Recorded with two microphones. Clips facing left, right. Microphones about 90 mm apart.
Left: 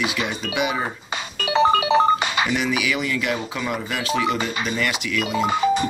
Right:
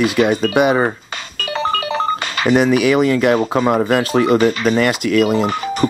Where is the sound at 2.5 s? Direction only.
45° right (ahead or behind).